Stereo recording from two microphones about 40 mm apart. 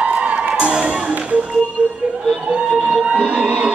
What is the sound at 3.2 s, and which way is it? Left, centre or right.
Music, right.